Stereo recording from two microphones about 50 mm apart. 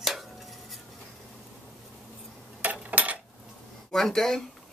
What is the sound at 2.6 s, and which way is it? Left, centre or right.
Dishes, right.